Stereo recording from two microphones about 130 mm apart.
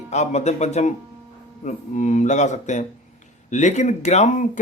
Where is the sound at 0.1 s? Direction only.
60° left (ahead or behind).